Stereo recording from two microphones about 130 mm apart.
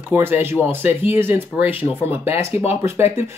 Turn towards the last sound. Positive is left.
turn(degrees=-20)  # may be behind; listen again after turning